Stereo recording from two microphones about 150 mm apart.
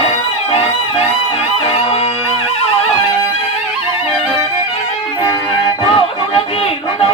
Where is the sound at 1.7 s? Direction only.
40° left (ahead or behind).